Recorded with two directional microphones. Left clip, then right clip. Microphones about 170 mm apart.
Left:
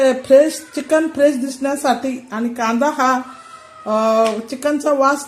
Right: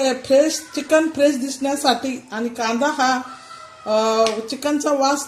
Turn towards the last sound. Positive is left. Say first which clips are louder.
# left 3 dB
turn(degrees=10)  # may be behind; listen again after turning